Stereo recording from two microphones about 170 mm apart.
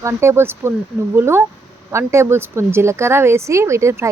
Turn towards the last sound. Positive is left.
turn(degrees=-15)  # may be behind; listen again after turning